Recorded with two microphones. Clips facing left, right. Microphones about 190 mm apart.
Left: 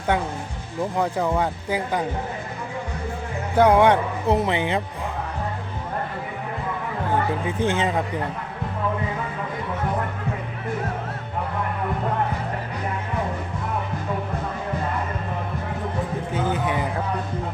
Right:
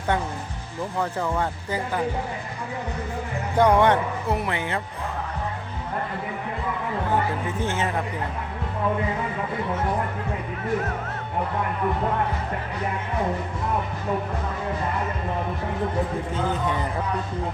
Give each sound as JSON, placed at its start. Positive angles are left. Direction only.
{"t": 0.9, "sound": "speech", "side_deg": 15}
{"t": 3.6, "sound": "speech", "side_deg": 10}
{"t": 7.4, "sound": "speech", "side_deg": 15}
{"t": 16.5, "sound": "speech", "side_deg": 10}